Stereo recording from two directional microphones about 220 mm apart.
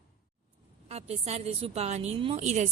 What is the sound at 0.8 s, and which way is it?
A woman's voice, 30° right (ahead or behind).